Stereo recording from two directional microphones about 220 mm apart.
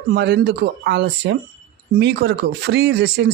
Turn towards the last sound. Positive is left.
turn(degrees=-50)  # may be behind; listen again after turning